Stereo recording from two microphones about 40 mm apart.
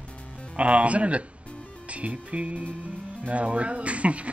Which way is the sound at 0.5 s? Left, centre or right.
Right.